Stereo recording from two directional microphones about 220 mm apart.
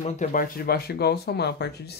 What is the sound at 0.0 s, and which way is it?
Speech, 35° left (ahead or behind).